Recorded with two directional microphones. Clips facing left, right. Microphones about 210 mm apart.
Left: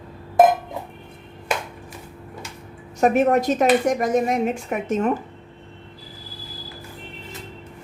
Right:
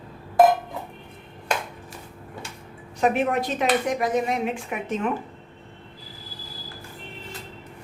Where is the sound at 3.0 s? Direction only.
45° left (ahead or behind).